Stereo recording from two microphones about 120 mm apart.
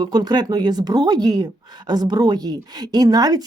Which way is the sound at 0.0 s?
35° right (ahead or behind).